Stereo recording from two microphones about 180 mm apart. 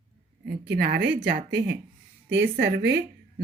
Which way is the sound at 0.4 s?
60° right (ahead or behind).